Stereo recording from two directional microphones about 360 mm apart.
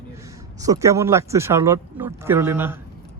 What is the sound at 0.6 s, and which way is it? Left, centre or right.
Speech, centre.